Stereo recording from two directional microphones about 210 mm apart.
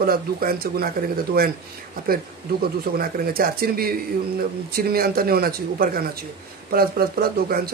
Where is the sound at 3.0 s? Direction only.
45° right (ahead or behind).